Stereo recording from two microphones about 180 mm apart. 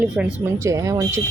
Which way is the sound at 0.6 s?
15° right (ahead or behind).